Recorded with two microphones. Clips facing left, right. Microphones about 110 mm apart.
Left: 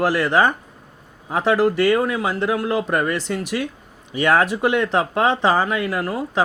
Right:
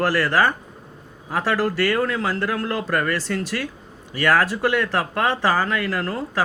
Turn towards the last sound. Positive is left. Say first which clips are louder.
# left 2 dB
turn(degrees=15)  # may be behind; listen again after turning